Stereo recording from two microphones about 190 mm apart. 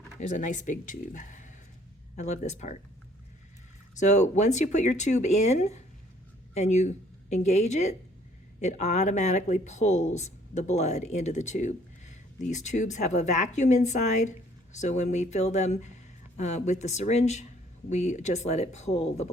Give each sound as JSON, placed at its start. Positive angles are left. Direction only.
{"t": 0.2, "sound": "speech", "side_deg": 40}
{"t": 3.9, "sound": "a woman's voice", "side_deg": 40}